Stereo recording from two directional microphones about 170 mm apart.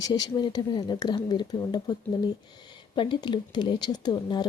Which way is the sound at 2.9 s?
30° left (ahead or behind).